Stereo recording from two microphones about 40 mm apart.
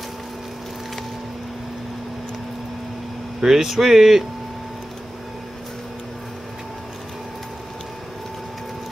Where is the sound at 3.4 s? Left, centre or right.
Centre.